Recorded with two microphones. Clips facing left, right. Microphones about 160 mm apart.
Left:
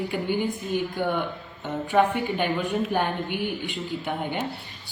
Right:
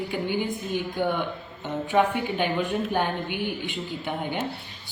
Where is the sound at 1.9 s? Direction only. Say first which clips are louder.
Left 1 dB; centre (ahead or behind).